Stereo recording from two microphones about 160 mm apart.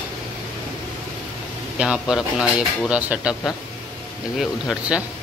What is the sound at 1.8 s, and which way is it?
A man's voice, 5° right (ahead or behind).